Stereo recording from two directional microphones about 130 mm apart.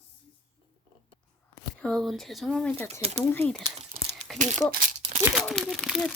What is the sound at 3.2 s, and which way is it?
Speech, 15° left (ahead or behind).